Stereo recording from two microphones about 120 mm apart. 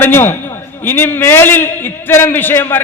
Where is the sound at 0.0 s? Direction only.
20° left (ahead or behind).